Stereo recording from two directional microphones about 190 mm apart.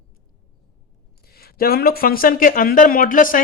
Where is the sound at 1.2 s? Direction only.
55° left (ahead or behind).